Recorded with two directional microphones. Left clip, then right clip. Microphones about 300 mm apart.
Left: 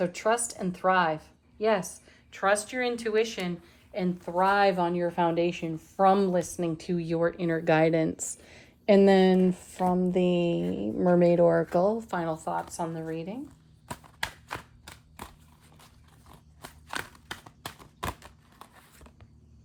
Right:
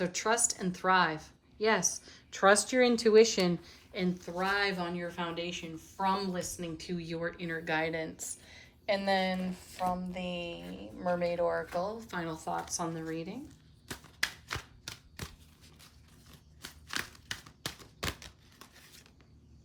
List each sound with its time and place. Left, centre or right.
0.0 s speech: centre
3.9 s speech: centre